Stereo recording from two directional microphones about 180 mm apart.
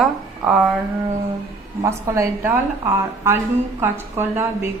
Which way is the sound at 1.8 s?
15° right (ahead or behind).